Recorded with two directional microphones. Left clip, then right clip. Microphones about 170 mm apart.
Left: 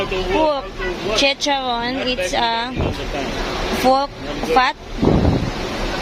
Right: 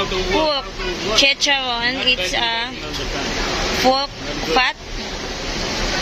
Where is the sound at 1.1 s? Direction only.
25° left (ahead or behind).